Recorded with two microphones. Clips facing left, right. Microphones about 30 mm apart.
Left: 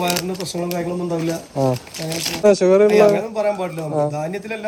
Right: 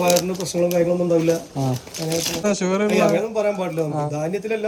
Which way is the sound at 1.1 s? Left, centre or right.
Left.